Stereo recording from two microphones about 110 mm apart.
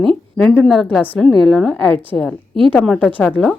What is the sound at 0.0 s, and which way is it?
A woman's voice, 5° left (ahead or behind).